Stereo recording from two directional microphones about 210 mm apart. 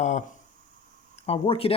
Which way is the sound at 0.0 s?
35° left (ahead or behind).